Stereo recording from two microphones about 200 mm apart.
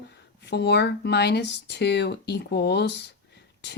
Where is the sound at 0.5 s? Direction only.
55° left (ahead or behind).